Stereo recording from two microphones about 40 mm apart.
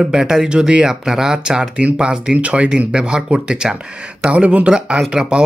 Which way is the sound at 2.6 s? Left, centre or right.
Right.